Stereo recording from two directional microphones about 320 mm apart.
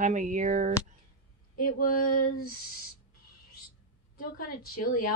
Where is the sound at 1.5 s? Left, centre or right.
Left.